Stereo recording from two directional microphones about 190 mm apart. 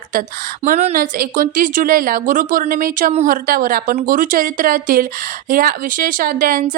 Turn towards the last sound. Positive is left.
turn(degrees=-45)  # may be behind; listen again after turning